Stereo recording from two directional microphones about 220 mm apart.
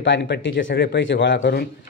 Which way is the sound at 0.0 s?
55° left (ahead or behind).